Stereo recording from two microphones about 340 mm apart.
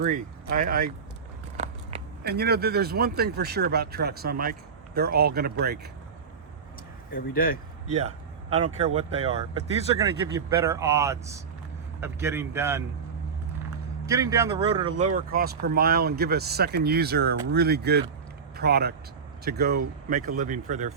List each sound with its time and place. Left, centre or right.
0.0 s speech: right
7.1 s speech: left
7.9 s a man's voice: centre
14.1 s speech: centre
14.9 s speech: right